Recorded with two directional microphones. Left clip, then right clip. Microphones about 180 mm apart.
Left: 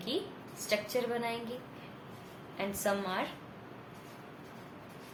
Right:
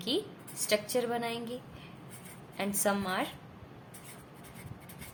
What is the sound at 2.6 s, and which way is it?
Speech, 35° right (ahead or behind).